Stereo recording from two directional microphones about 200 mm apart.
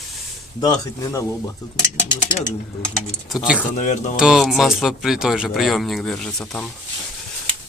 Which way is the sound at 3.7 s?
35° left (ahead or behind).